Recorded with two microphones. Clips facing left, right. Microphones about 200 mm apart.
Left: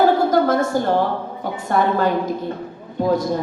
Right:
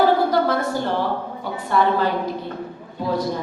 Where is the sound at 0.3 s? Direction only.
45° left (ahead or behind).